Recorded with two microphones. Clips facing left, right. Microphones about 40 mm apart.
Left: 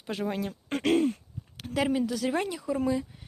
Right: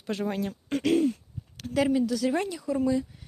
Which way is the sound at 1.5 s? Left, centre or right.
Centre.